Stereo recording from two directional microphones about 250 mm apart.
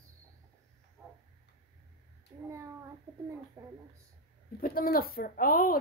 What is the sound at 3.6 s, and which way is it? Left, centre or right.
Speech, centre.